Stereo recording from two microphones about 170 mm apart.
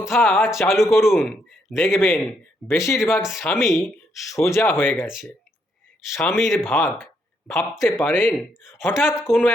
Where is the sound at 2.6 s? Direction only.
15° left (ahead or behind).